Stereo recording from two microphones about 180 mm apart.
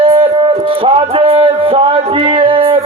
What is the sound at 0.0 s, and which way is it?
Music, 30° right (ahead or behind).